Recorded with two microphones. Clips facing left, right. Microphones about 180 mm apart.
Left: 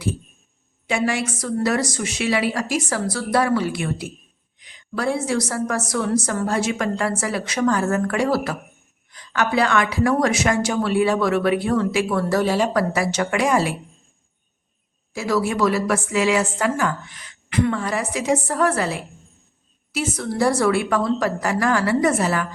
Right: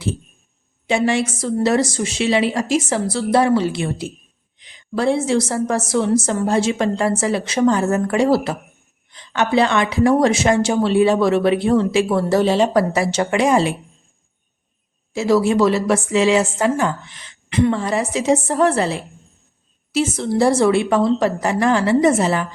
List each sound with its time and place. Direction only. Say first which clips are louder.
0.9 s a woman's voice: right 4 dB; 25° right (ahead or behind)
15.1 s a woman's voice: right 6 dB; 25° right (ahead or behind)